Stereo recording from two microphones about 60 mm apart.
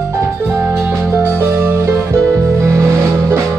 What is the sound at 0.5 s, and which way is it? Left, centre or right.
Music, right.